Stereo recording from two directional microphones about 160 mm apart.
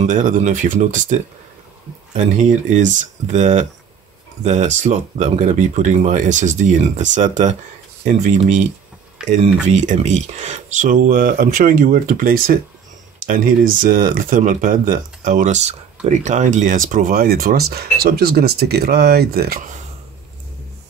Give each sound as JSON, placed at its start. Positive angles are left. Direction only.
{"t": 0.0, "sound": "speech", "side_deg": -50}
{"t": 9.2, "sound": "speech", "side_deg": -5}
{"t": 9.7, "sound": "speech", "side_deg": -45}